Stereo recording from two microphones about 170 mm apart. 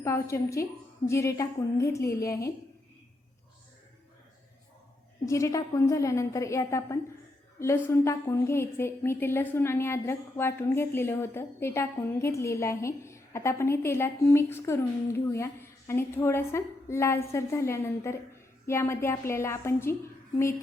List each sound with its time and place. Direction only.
0.0 s a woman's voice: 15° left (ahead or behind)
5.2 s a woman's voice: 20° left (ahead or behind)